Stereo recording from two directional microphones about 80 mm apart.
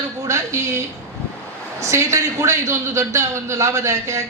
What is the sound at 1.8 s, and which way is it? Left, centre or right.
A man's voice, right.